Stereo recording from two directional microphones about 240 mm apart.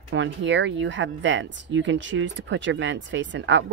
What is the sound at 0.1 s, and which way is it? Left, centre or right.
Speech, right.